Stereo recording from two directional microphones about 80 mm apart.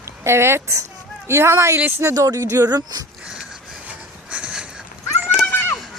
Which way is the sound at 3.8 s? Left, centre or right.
Centre.